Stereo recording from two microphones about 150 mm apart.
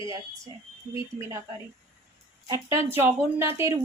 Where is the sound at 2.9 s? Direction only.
15° right (ahead or behind).